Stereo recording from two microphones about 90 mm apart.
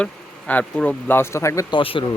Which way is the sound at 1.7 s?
70° left (ahead or behind).